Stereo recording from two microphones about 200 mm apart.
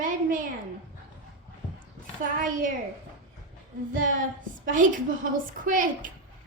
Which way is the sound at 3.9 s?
40° right (ahead or behind).